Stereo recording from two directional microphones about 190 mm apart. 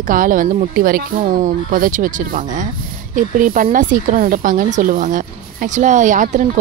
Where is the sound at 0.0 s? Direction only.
45° right (ahead or behind).